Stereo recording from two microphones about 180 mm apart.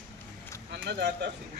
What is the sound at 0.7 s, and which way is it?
Speech, 70° right (ahead or behind).